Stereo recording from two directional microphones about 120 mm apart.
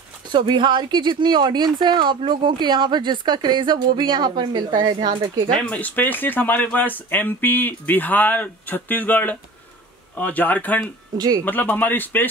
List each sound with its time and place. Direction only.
0.3 s speech: 40° right (ahead or behind)
5.6 s speech: 10° left (ahead or behind)
11.1 s speech: 30° right (ahead or behind)
11.4 s speech: 15° left (ahead or behind)